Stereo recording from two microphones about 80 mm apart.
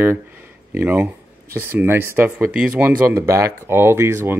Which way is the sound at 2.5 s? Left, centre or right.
Centre.